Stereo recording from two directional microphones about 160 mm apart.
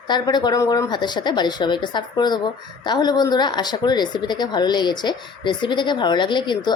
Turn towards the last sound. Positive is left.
turn(degrees=30)  # may be behind; listen again after turning